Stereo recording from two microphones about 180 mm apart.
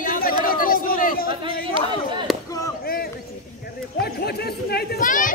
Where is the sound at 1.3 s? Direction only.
30° right (ahead or behind).